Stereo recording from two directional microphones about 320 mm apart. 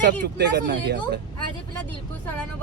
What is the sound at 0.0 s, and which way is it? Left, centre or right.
Speech, right.